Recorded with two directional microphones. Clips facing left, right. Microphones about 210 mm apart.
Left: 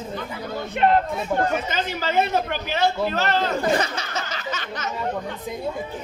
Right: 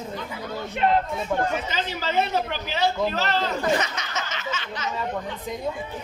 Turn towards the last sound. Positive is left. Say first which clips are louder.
# left 1 dB
turn(degrees=45)  # may be behind; listen again after turning